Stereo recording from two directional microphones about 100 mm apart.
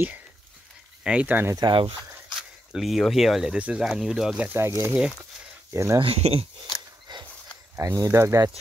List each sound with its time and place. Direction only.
1.0 s speech: 15° right (ahead or behind)
1.7 s speech: 60° right (ahead or behind)
2.3 s speech: 5° right (ahead or behind)
4.5 s speech: 25° right (ahead or behind)
5.9 s speech: 75° right (ahead or behind)
7.1 s a sound: 50° right (ahead or behind)
7.7 s speech: 30° right (ahead or behind)